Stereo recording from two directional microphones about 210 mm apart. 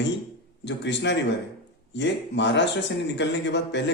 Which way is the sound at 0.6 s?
55° left (ahead or behind).